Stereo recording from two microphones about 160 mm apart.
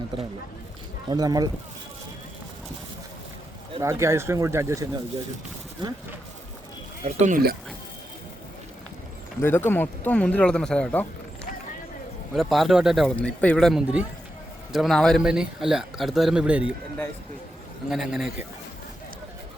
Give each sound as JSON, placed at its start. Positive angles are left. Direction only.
{"t": 1.1, "sound": "speech", "side_deg": -25}
{"t": 3.8, "sound": "speech", "side_deg": -20}
{"t": 7.0, "sound": "speech", "side_deg": -50}
{"t": 9.4, "sound": "speech", "side_deg": 15}
{"t": 12.3, "sound": "speech", "side_deg": 0}
{"t": 17.8, "sound": "speech", "side_deg": -5}